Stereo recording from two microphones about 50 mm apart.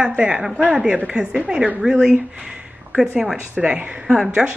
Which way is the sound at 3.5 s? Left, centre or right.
Right.